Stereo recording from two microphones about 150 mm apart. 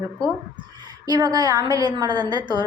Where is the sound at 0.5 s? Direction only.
25° right (ahead or behind).